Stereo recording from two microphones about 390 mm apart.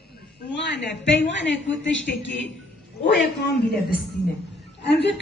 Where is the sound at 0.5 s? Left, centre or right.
Left.